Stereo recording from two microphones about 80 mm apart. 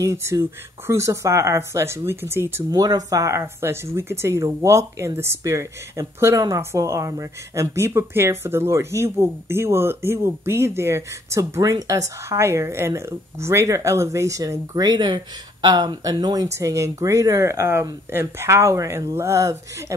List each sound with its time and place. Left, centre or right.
0.0 s a woman's voice: right
2.7 s a woman's voice: right
6.3 s speech: right
6.6 s a woman's voice: right
14.8 s speech: right
16.5 s a woman's voice: right